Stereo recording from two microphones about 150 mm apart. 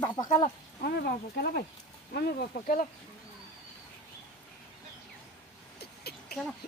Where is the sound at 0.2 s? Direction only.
25° left (ahead or behind).